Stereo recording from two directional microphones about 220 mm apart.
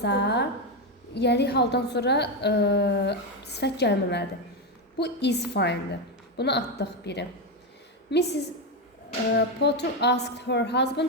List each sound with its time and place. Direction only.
0.0 s a woman's voice: 50° left (ahead or behind)